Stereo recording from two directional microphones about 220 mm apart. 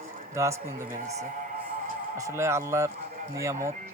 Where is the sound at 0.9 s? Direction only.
30° right (ahead or behind).